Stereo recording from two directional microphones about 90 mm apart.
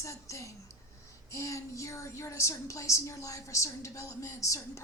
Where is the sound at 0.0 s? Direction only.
35° left (ahead or behind).